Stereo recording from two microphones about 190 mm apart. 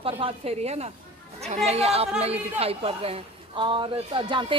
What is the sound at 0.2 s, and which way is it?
A woman's voice, 30° right (ahead or behind).